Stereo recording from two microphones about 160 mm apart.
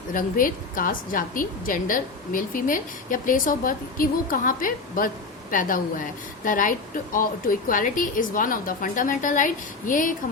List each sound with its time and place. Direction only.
0.1 s a woman's voice: 60° left (ahead or behind)